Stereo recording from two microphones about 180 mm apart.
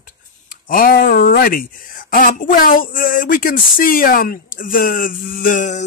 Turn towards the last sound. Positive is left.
turn(degrees=45)  # may be behind; listen again after turning